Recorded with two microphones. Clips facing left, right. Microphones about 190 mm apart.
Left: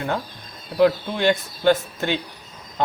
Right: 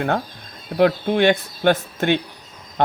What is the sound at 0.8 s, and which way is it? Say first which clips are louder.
Speech: right 2 dB; 60° right (ahead or behind).